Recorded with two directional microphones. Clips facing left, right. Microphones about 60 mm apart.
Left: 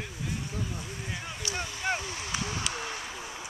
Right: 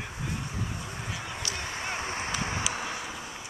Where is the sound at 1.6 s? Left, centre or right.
Right.